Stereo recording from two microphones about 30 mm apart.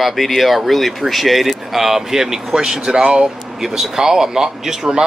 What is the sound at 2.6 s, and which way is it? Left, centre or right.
Speech, right.